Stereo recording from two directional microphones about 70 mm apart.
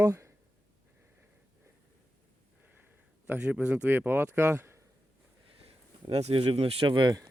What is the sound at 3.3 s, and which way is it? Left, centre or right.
A man's voice, right.